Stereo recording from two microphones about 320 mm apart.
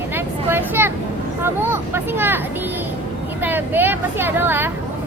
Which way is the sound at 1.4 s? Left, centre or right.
Centre.